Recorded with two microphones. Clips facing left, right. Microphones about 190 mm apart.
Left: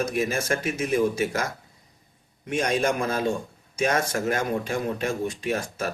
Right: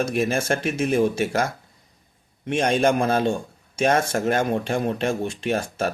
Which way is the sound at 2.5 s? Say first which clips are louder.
Right 4 dB; 30° right (ahead or behind).